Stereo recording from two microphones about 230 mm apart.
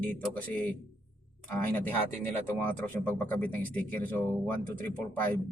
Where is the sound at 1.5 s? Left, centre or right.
Centre.